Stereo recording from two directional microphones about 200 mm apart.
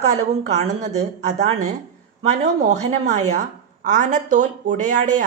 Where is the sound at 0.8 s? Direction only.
35° right (ahead or behind).